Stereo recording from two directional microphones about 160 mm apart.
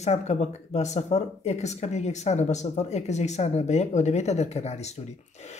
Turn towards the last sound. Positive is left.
turn(degrees=45)  # may be behind; listen again after turning